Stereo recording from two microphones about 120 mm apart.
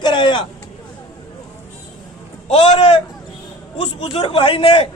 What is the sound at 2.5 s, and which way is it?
A man's voice, 50° left (ahead or behind).